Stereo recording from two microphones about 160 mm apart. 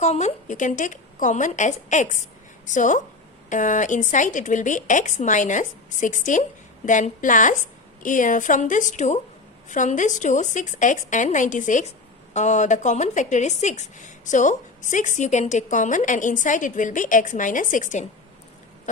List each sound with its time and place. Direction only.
0.0 s a woman's voice: 45° left (ahead or behind)